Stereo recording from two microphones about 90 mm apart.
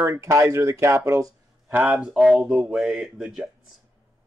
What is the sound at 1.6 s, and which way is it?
Speech, 20° right (ahead or behind).